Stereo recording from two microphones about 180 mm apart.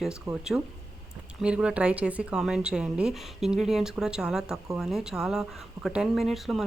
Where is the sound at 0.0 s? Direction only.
5° right (ahead or behind).